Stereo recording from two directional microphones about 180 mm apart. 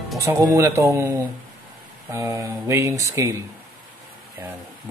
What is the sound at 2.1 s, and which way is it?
Speech, 15° right (ahead or behind).